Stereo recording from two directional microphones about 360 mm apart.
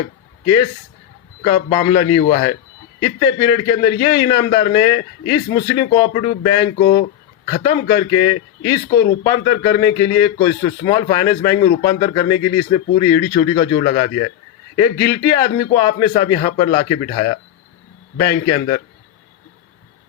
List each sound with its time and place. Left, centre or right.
1.4 s a man's voice: centre